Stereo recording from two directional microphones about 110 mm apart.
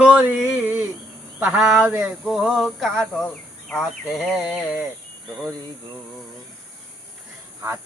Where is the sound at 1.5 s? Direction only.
5° right (ahead or behind).